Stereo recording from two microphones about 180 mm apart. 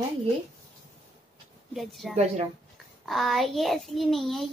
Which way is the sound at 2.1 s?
40° right (ahead or behind).